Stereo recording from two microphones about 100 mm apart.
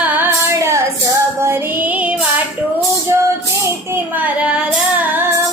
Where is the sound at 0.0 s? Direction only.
20° right (ahead or behind).